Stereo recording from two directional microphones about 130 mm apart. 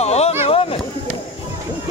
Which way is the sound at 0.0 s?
55° left (ahead or behind).